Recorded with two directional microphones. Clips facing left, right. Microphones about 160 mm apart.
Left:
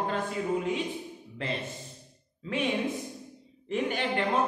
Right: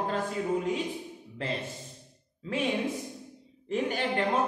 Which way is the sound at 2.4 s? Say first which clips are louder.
Even; 35° right (ahead or behind).